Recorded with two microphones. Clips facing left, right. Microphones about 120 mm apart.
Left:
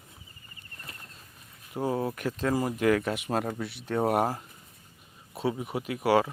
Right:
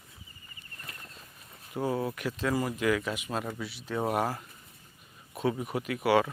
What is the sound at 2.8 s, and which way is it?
Speech, 50° left (ahead or behind).